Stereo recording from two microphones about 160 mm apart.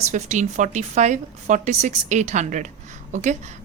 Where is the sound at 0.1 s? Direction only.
50° right (ahead or behind).